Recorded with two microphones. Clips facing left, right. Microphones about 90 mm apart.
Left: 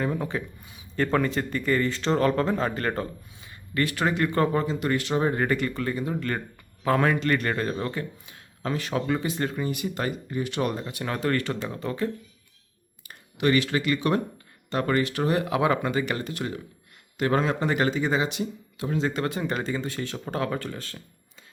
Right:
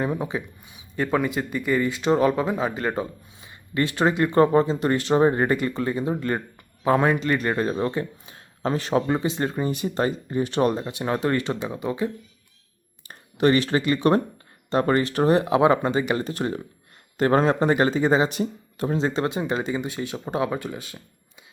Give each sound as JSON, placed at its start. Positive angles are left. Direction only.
{"t": 0.0, "sound": "speech", "side_deg": -15}
{"t": 3.4, "sound": "speech", "side_deg": -25}
{"t": 10.8, "sound": "speech", "side_deg": -20}
{"t": 13.1, "sound": "speech", "side_deg": -35}